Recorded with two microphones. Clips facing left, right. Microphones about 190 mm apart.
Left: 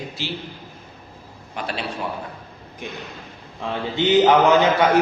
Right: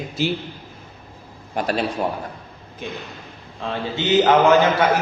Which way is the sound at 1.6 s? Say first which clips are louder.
Right 6 dB; 45° right (ahead or behind).